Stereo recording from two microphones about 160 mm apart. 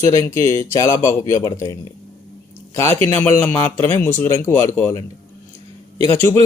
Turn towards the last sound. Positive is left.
turn(degrees=15)  # may be behind; listen again after turning